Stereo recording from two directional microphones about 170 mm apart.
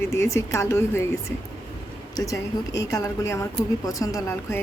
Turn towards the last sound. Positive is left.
turn(degrees=15)  # may be behind; listen again after turning